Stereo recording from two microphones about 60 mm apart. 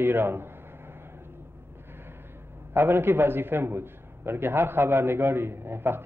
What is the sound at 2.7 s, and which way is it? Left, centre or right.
A man's voice, right.